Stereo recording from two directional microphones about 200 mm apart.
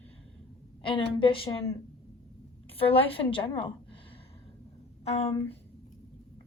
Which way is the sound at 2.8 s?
30° left (ahead or behind).